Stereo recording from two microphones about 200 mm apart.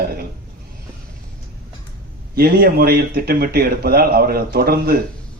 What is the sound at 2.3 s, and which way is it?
Speech, 50° right (ahead or behind).